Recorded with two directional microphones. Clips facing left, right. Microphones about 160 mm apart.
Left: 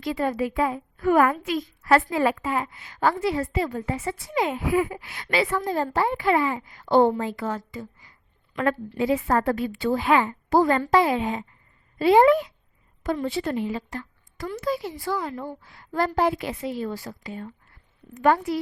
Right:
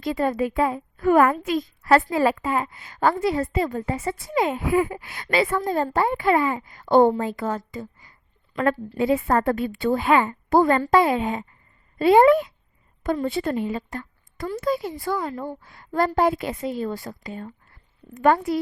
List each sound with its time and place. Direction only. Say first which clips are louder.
0.0 s a child's voice: right 2 dB; 45° right (ahead or behind)